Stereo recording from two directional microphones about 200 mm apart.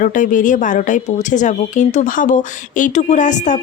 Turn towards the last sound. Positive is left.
turn(degrees=40)  # may be behind; listen again after turning